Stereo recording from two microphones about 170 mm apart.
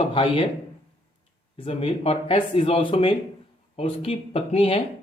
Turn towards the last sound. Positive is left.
turn(degrees=35)  # may be behind; listen again after turning